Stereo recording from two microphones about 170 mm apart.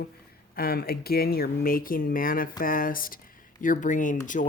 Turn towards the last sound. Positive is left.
turn(degrees=50)  # may be behind; listen again after turning